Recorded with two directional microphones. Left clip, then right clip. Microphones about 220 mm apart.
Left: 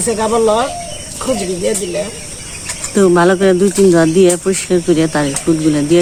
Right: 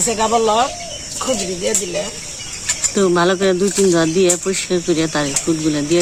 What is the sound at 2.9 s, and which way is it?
Speech, centre (ahead or behind).